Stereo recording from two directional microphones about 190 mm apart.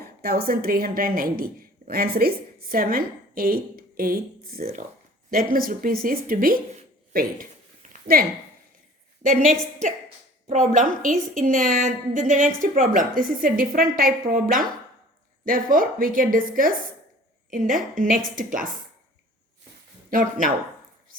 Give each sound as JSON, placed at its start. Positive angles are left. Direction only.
{"t": 0.0, "sound": "a woman's voice", "side_deg": -55}
{"t": 7.1, "sound": "a sound", "side_deg": -50}
{"t": 9.2, "sound": "a woman's voice", "side_deg": -45}
{"t": 10.7, "sound": "a woman's voice", "side_deg": -40}
{"t": 17.9, "sound": "a woman's voice", "side_deg": -45}
{"t": 20.1, "sound": "speech", "side_deg": -45}